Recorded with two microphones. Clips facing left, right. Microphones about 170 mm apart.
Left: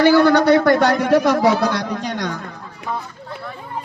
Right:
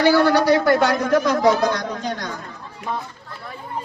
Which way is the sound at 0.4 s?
70° left (ahead or behind).